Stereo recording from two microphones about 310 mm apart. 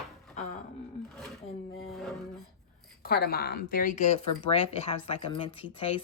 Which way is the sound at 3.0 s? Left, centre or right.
Left.